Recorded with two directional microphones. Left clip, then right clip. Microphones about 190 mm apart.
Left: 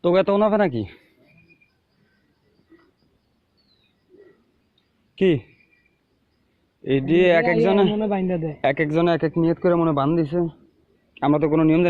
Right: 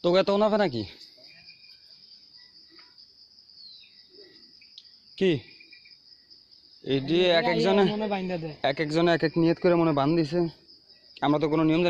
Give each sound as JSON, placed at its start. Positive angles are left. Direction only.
{"t": 0.0, "sound": "speech", "side_deg": -30}
{"t": 5.1, "sound": "speech", "side_deg": -15}
{"t": 6.8, "sound": "speech", "side_deg": -10}
{"t": 7.7, "sound": "speech", "side_deg": -25}
{"t": 7.9, "sound": "a man's voice", "side_deg": 30}
{"t": 8.6, "sound": "speech", "side_deg": -10}
{"t": 9.0, "sound": "a man's voice", "side_deg": -25}
{"t": 11.1, "sound": "speech", "side_deg": -15}